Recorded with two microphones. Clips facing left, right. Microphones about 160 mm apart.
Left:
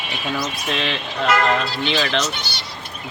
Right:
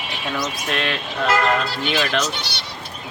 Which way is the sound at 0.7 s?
Centre (ahead or behind).